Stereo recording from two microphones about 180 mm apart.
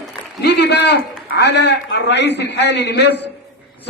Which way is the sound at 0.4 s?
70° left (ahead or behind).